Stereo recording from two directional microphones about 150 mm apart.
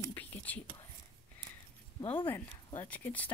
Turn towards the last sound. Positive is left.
turn(degrees=10)  # may be behind; listen again after turning